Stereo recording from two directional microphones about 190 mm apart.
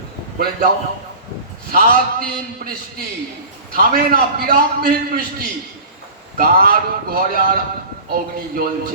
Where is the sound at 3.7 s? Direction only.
50° right (ahead or behind).